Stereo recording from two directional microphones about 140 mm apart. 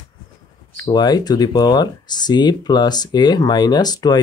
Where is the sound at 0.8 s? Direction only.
30° left (ahead or behind).